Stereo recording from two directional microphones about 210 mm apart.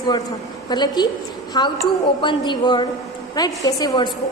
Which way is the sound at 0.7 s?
20° left (ahead or behind).